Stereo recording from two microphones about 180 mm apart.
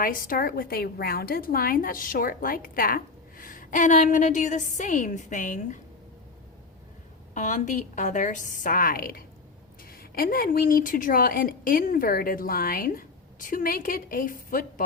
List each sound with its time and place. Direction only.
0.0 s speech: 50° left (ahead or behind)
7.3 s speech: 45° left (ahead or behind)